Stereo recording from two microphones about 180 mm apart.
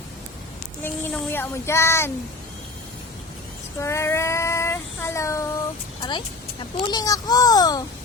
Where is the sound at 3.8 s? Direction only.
15° left (ahead or behind).